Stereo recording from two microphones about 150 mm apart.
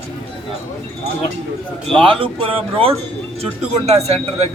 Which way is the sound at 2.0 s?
35° right (ahead or behind).